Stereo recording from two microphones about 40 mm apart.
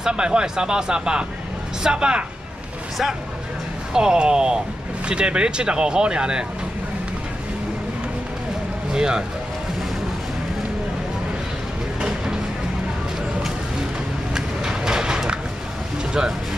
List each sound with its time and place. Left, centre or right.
0.0 s speech: right
3.9 s speech: centre
8.9 s speech: centre
14.3 s vehicle: centre
16.1 s speech: centre